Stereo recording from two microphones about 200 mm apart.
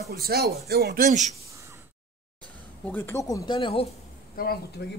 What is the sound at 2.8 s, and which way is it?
Speech, 10° left (ahead or behind).